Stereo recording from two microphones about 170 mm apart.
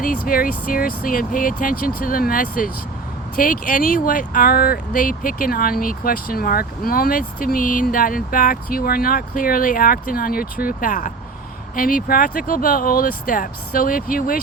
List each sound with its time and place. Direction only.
0.0 s speech: 55° left (ahead or behind)